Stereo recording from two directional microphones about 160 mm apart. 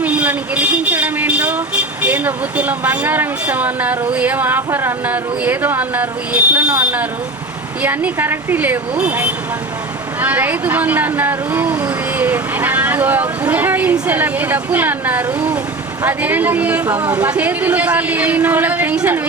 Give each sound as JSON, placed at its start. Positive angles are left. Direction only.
{"t": 0.0, "sound": "a woman's voice", "side_deg": -10}